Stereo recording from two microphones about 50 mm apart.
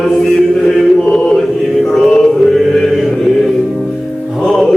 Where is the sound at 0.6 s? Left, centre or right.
Centre.